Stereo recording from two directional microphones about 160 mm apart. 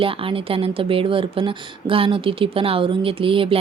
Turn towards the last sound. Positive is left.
turn(degrees=-35)  # may be behind; listen again after turning